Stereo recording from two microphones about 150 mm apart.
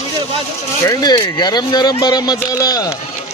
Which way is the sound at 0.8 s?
25° left (ahead or behind).